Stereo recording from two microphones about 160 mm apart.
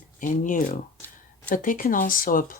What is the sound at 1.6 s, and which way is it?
Speech, 60° left (ahead or behind).